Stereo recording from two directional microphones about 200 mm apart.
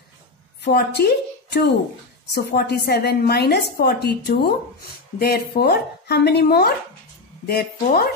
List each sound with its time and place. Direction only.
0.6 s a woman's voice: 55° left (ahead or behind)